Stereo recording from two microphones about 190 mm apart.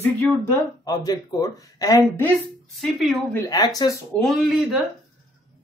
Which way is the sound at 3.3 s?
20° left (ahead or behind).